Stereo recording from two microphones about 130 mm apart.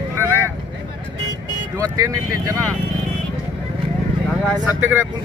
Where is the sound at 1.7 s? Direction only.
25° right (ahead or behind).